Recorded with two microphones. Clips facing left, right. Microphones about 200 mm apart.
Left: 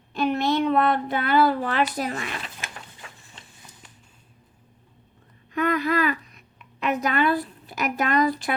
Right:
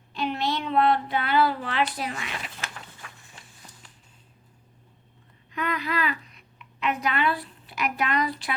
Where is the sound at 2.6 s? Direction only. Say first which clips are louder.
Even; 25° left (ahead or behind).